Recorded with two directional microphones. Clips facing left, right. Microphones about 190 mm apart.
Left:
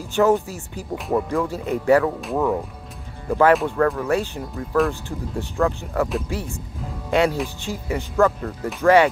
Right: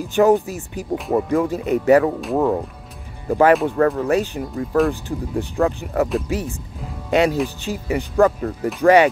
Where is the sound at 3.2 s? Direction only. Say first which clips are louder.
Right 2 dB; 20° right (ahead or behind).